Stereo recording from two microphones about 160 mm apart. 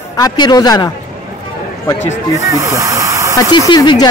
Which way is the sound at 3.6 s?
25° left (ahead or behind).